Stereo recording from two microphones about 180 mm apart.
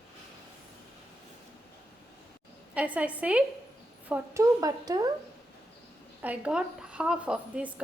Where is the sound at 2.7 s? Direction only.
5° right (ahead or behind).